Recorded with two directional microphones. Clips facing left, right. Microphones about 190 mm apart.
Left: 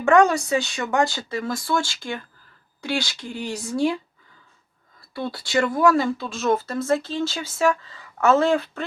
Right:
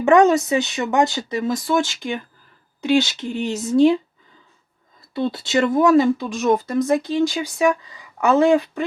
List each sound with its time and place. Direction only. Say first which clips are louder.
0.0 s speech: right 3 dB; 20° right (ahead or behind)